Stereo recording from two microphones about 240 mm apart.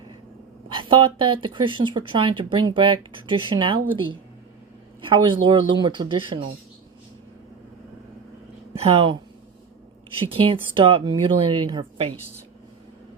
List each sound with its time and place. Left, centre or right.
0.7 s speech: right
8.7 s speech: right
10.2 s speech: right